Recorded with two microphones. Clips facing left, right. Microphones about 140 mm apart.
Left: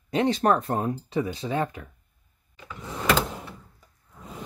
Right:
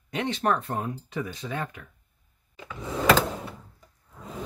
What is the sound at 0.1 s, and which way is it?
Speech, 35° left (ahead or behind).